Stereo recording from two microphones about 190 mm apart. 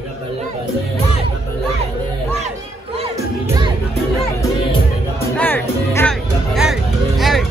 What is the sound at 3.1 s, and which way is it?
Music, 15° right (ahead or behind).